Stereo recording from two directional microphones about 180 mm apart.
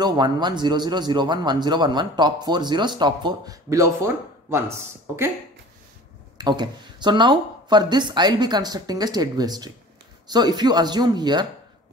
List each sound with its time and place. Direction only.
0.0 s a man's voice: 25° right (ahead or behind)
6.3 s a man's voice: 25° right (ahead or behind)